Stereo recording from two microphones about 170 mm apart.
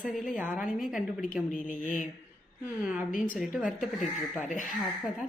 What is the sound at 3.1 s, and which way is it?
Speech, 50° left (ahead or behind).